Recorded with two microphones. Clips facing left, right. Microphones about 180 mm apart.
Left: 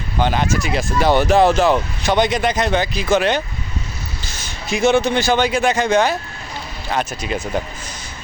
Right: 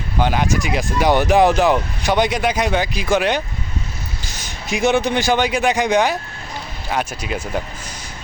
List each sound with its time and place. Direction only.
0.2 s a man's voice: 10° right (ahead or behind)